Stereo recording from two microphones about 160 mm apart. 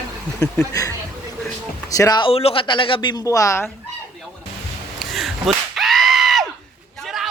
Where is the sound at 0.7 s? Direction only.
20° left (ahead or behind).